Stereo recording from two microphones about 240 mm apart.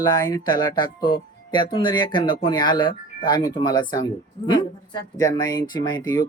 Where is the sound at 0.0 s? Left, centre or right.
Centre.